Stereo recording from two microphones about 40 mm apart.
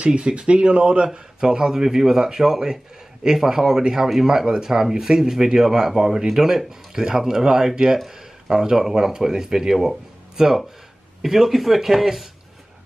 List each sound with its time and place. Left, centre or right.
0.0 s speech: right; by 12.3 s centre